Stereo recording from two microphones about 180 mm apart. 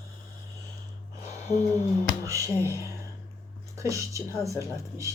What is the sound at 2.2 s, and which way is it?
Speech, 15° right (ahead or behind).